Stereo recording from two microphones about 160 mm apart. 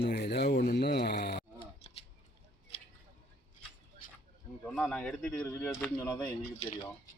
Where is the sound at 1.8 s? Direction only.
35° left (ahead or behind).